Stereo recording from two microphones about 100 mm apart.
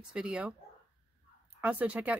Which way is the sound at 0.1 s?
10° right (ahead or behind).